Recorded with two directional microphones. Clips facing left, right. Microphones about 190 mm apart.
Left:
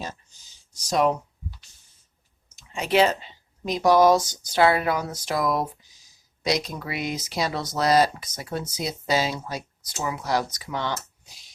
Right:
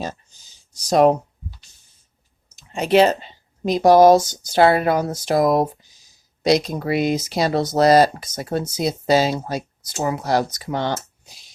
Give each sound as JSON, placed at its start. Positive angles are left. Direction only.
{"t": 0.9, "sound": "speech", "side_deg": -35}
{"t": 2.7, "sound": "speech", "side_deg": -40}
{"t": 9.9, "sound": "speech", "side_deg": -45}